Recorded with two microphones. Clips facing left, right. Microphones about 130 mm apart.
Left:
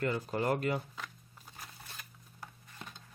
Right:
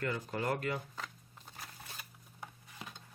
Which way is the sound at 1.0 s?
Centre (ahead or behind).